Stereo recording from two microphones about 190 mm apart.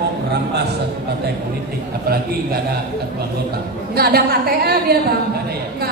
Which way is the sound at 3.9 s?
55° right (ahead or behind).